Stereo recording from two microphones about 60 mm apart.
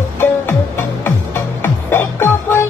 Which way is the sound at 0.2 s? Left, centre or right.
Left.